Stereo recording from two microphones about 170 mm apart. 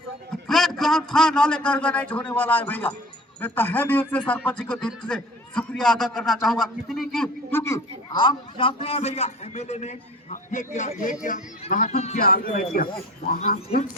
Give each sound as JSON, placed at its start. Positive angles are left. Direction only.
{"t": 0.4, "sound": "a man's voice", "side_deg": 0}
{"t": 7.5, "sound": "a man's voice", "side_deg": 15}
{"t": 8.1, "sound": "a man's voice", "side_deg": 30}
{"t": 12.2, "sound": "a man's voice", "side_deg": 60}